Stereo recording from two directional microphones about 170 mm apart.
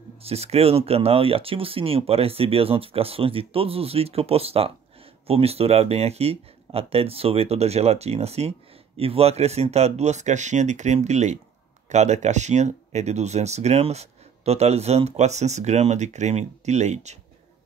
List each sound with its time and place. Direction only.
0.2 s speech: 35° right (ahead or behind)